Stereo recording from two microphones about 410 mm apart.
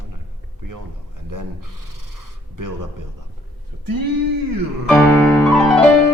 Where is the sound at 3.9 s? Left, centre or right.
Right.